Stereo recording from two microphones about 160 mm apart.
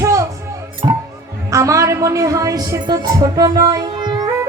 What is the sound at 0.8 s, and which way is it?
Speech, 30° right (ahead or behind).